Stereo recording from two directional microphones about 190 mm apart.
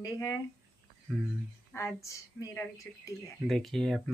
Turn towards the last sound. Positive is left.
turn(degrees=0)  # may be behind; listen again after turning